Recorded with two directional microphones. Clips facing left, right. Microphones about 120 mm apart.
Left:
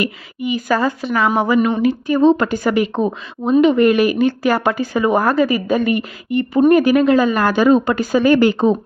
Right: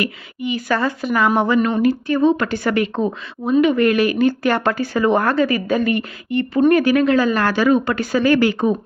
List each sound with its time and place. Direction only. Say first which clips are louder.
0.7 s a woman's voice: left 3 dB; 10° left (ahead or behind)
1.0 s a woman's voice: even; centre (ahead or behind); by 8.8 s 25° left (ahead or behind)